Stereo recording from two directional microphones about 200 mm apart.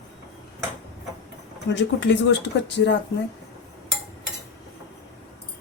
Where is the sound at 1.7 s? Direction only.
65° left (ahead or behind).